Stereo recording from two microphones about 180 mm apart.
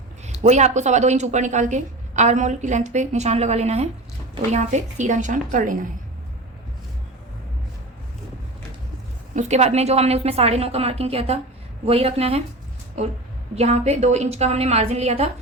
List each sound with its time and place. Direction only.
0.3 s a woman's voice: 40° right (ahead or behind)
9.3 s a woman's voice: 40° right (ahead or behind)
13.6 s a woman's voice: 35° right (ahead or behind)